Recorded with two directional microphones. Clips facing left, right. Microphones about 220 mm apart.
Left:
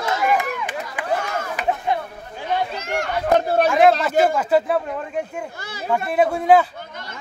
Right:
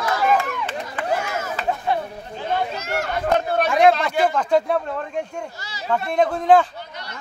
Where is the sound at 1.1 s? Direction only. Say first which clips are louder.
Even; 5° right (ahead or behind).